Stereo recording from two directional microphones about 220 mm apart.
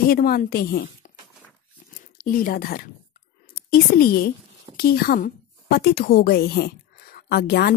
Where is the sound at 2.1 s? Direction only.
40° left (ahead or behind).